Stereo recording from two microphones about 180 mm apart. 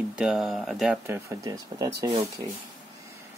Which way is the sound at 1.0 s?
15° right (ahead or behind).